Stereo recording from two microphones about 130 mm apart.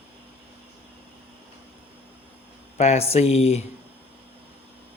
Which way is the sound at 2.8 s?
55° left (ahead or behind).